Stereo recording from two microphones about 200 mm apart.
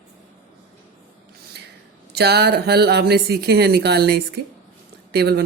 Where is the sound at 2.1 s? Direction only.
55° right (ahead or behind).